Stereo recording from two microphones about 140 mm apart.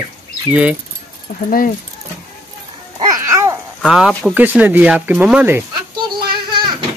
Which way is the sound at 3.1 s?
20° right (ahead or behind).